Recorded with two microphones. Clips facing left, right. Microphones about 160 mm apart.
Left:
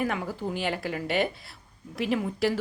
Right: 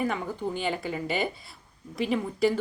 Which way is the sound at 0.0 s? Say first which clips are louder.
Even; 5° left (ahead or behind).